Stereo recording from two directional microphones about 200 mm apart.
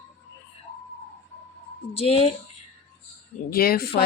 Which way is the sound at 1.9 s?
30° left (ahead or behind).